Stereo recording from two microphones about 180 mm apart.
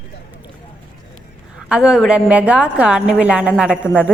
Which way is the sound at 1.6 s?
5° right (ahead or behind).